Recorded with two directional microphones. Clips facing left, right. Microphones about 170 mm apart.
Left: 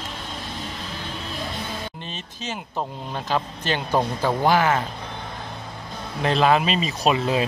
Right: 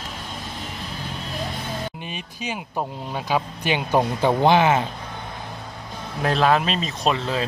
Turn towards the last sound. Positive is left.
turn(degrees=10)  # may be behind; listen again after turning